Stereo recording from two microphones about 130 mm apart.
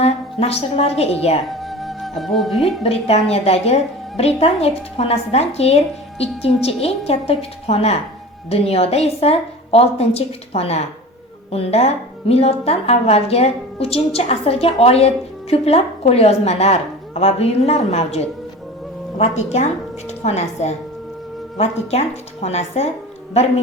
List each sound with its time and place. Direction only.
0.0 s a woman's voice: 50° left (ahead or behind)
1.5 s music: centre (ahead or behind)
2.8 s a woman's voice: 55° left (ahead or behind)